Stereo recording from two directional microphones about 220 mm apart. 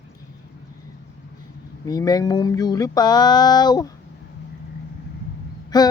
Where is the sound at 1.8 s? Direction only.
15° left (ahead or behind).